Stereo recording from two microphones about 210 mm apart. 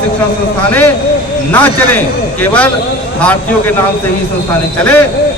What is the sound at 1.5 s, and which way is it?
Speech, 10° left (ahead or behind).